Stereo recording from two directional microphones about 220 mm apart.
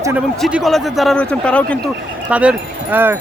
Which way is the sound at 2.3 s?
5° right (ahead or behind).